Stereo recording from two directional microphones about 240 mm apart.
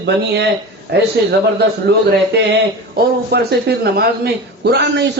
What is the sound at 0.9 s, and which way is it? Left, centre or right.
Speech, right.